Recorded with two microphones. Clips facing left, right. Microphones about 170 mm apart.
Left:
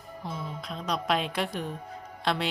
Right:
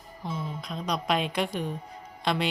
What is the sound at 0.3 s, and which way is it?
Speech, centre (ahead or behind).